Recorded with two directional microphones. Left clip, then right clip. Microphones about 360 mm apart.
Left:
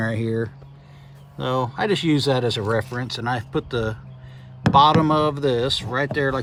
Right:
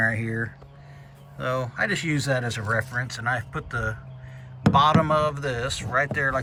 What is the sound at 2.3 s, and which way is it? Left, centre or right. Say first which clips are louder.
Speech: left 4 dB; centre.